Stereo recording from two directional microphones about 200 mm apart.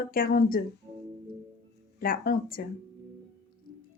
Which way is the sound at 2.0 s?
45° left (ahead or behind).